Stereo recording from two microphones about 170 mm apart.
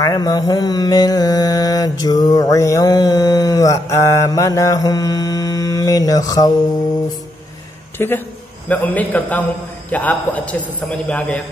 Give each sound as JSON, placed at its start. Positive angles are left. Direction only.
{"t": 0.0, "sound": "mantra", "side_deg": 20}
{"t": 8.0, "sound": "a man's voice", "side_deg": 15}